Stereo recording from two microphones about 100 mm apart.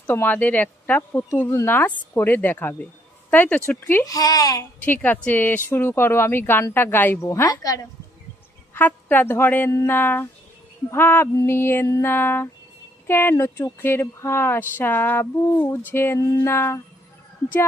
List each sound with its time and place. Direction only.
0.0 s speech: 20° left (ahead or behind)
4.0 s speech: 35° left (ahead or behind)
4.7 s a woman's voice: 20° left (ahead or behind)
7.4 s speech: 40° left (ahead or behind)
8.7 s a woman's voice: 20° left (ahead or behind)